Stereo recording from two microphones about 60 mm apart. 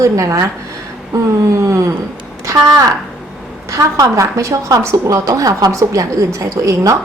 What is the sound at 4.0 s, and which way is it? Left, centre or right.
A woman's voice, right.